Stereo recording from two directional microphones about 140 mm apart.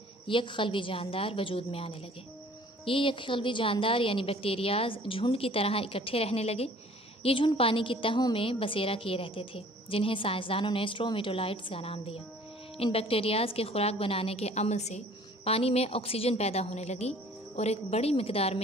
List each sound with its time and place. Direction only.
0.3 s a woman's voice: 35° left (ahead or behind)